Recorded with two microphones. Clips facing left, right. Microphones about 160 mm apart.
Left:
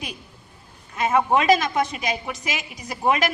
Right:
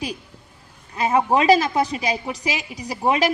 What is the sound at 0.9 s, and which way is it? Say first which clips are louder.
A woman's voice: right 1 dB; 35° right (ahead or behind).